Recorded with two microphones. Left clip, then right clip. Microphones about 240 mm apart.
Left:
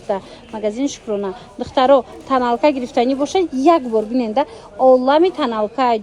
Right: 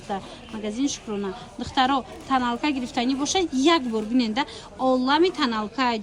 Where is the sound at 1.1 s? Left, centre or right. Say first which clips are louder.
Left 8 dB; left.